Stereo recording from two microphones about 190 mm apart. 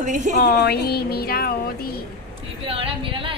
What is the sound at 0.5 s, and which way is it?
Speech, 60° left (ahead or behind).